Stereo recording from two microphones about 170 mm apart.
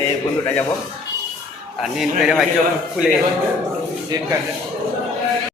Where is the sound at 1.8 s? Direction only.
5° right (ahead or behind).